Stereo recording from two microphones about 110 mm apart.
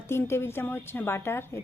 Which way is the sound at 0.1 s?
20° left (ahead or behind).